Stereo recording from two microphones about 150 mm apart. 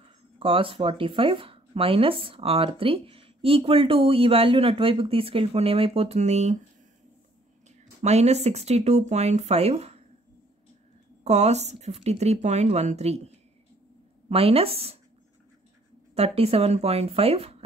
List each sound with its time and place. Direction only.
0.4 s speech: 35° right (ahead or behind)
8.0 s speech: 45° right (ahead or behind)
11.2 s speech: 50° right (ahead or behind)
14.3 s speech: 40° right (ahead or behind)
16.2 s speech: 40° right (ahead or behind)